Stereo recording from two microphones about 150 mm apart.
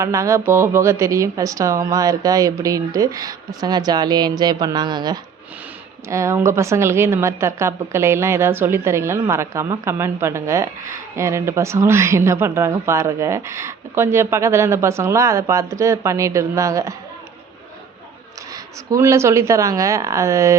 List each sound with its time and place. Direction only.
0.0 s a woman's voice: 20° right (ahead or behind)
18.5 s a woman's voice: 20° right (ahead or behind)